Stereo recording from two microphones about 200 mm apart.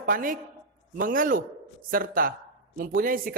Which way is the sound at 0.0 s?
45° right (ahead or behind).